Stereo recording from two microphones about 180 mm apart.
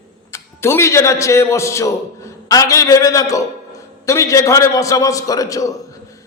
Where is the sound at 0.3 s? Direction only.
15° left (ahead or behind).